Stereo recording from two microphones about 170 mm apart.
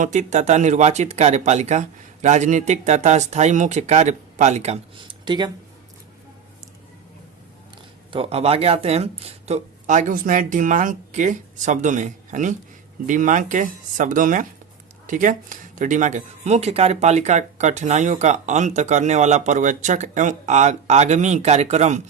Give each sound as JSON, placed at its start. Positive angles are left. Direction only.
{"t": 0.0, "sound": "speech", "side_deg": -45}
{"t": 5.2, "sound": "speech", "side_deg": -25}
{"t": 8.1, "sound": "speech", "side_deg": -35}